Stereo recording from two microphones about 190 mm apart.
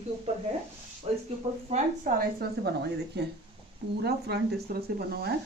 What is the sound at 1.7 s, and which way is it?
Speech, 45° right (ahead or behind).